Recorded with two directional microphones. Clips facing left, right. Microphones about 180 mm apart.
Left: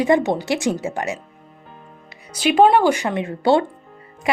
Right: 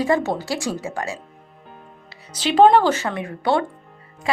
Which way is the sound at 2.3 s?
10° left (ahead or behind).